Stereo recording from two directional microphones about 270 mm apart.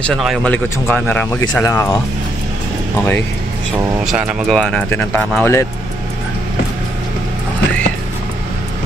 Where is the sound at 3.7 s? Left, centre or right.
Centre.